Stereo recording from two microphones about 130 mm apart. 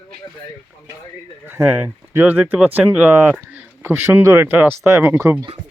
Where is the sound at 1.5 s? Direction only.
15° right (ahead or behind).